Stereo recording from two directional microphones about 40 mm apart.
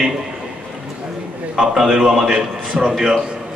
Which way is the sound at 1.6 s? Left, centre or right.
Centre.